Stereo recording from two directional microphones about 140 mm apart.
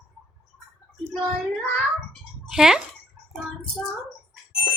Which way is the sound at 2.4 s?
5° right (ahead or behind).